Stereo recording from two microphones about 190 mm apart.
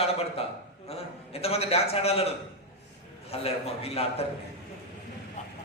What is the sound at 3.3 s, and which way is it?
Speech, 30° left (ahead or behind).